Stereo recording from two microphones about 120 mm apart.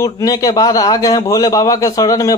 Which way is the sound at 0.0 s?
30° left (ahead or behind).